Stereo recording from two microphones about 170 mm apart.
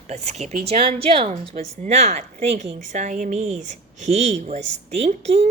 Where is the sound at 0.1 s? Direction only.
40° right (ahead or behind).